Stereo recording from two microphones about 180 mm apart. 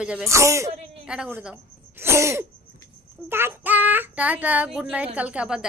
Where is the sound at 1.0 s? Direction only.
5° right (ahead or behind).